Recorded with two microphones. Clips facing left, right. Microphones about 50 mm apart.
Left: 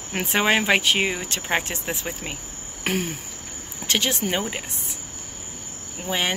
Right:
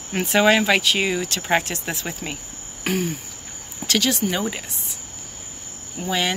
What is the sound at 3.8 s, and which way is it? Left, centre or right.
Speech, left.